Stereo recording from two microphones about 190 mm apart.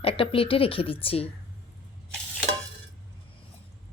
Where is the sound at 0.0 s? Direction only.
30° left (ahead or behind).